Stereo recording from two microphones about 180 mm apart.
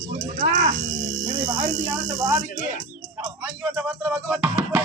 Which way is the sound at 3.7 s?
10° right (ahead or behind).